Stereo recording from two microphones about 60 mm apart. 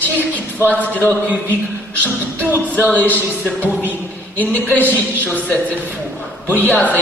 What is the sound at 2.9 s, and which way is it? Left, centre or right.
Speech, left.